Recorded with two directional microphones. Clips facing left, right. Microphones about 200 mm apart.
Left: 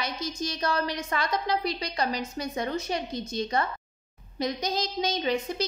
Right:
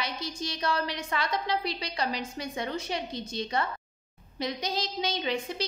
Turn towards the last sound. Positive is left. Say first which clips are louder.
# left 3 dB
turn(degrees=40)  # may be behind; listen again after turning